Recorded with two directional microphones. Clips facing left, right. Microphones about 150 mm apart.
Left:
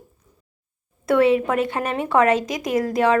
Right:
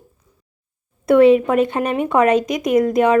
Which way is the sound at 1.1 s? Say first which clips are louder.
Right 6 dB; 20° right (ahead or behind).